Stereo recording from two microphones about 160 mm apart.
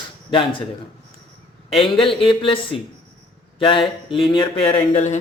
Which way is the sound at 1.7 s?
35° left (ahead or behind).